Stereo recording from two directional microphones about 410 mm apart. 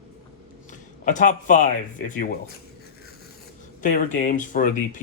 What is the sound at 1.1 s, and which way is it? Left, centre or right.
Speech, centre.